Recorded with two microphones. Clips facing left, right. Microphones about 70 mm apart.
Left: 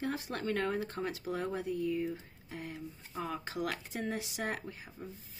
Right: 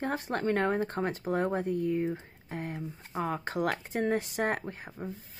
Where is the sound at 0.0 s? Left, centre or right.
Right.